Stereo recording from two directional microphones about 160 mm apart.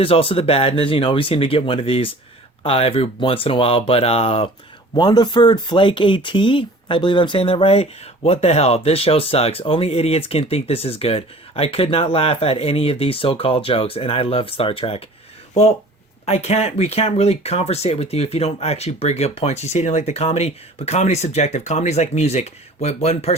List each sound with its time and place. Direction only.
0.0 s speech: 35° left (ahead or behind)
4.9 s speech: 25° left (ahead or behind)
16.2 s speech: 40° left (ahead or behind)